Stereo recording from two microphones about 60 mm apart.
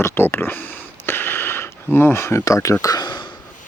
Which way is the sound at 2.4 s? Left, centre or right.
Left.